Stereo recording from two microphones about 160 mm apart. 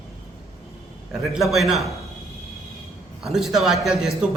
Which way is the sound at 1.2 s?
Centre (ahead or behind).